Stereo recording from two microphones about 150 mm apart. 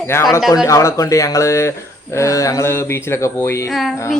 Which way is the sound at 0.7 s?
20° left (ahead or behind).